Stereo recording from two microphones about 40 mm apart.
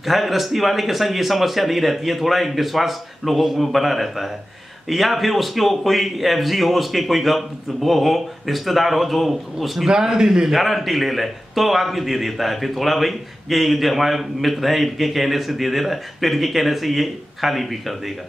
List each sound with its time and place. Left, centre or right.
0.0 s a man's voice: centre
9.9 s a man's voice: centre
10.5 s a man's voice: centre